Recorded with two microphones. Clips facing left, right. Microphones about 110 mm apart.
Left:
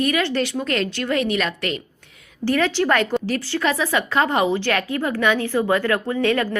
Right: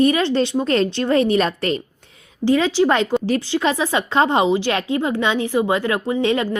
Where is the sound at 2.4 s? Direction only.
15° right (ahead or behind).